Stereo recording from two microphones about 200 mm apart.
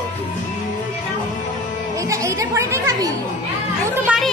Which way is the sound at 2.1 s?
15° right (ahead or behind).